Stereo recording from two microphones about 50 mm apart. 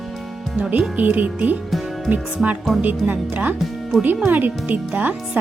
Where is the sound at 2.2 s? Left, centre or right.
Centre.